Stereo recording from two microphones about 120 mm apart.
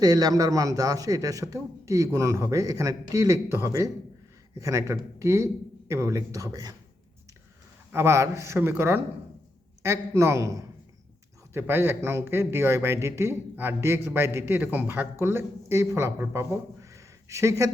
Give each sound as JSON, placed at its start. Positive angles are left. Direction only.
{"t": 0.0, "sound": "speech", "side_deg": -30}
{"t": 7.9, "sound": "speech", "side_deg": -20}